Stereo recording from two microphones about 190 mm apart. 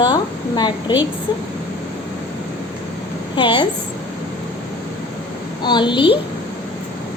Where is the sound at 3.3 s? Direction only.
25° left (ahead or behind).